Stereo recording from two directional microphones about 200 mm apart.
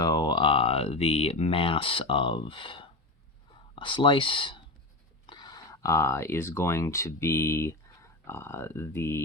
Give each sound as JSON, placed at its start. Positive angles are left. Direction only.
{"t": 0.0, "sound": "speech", "side_deg": 20}